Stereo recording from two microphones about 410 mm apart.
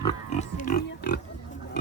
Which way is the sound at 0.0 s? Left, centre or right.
Centre.